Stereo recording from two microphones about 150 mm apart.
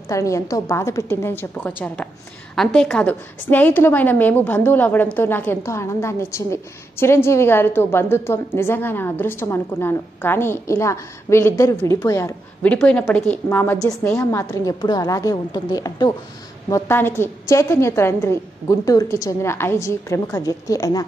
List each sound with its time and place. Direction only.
0.1 s a woman's voice: 20° left (ahead or behind)
12.6 s a woman's voice: 10° left (ahead or behind); by 16.1 s 25° left (ahead or behind)
16.7 s a woman's voice: 15° left (ahead or behind)